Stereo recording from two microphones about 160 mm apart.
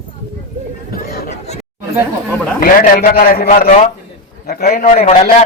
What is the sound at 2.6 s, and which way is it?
A man's voice, 65° left (ahead or behind).